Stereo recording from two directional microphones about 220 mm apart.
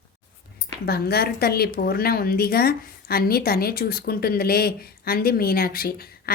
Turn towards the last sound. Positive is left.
turn(degrees=45)  # may be behind; listen again after turning